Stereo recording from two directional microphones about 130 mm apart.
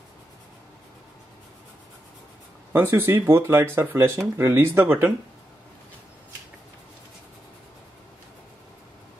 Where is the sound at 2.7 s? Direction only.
15° right (ahead or behind).